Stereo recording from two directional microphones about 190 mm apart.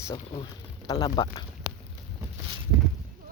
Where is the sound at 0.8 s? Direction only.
20° left (ahead or behind).